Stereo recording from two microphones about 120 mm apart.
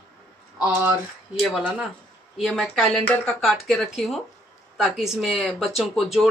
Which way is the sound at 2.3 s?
5° left (ahead or behind).